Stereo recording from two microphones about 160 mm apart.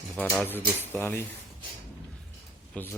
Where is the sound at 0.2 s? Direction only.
5° left (ahead or behind).